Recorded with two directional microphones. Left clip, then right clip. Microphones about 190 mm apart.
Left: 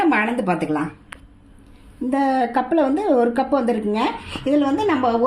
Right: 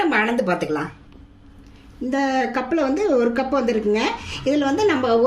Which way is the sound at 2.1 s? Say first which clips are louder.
Left 2 dB; 25° left (ahead or behind).